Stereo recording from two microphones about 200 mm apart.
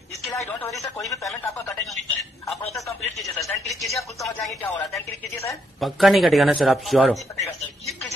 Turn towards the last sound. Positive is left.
turn(degrees=0)  # may be behind; listen again after turning